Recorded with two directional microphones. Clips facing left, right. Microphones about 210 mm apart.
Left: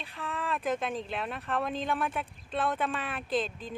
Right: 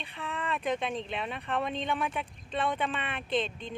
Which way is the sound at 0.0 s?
Centre (ahead or behind).